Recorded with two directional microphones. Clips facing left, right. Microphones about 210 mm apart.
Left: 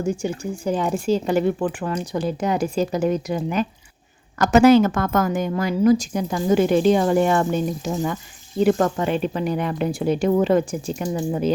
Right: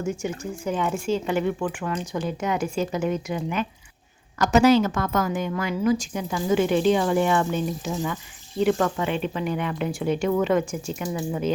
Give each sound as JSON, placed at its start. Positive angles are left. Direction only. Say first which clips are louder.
{"t": 0.0, "sound": "speech", "louder": "left 4 dB", "side_deg": 35}
{"t": 4.4, "sound": "speech", "louder": "left 4 dB", "side_deg": 50}